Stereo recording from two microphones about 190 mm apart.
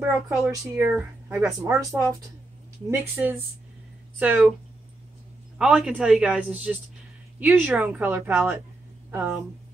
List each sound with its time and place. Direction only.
0.0 s speech: 10° right (ahead or behind)
5.6 s speech: 5° right (ahead or behind)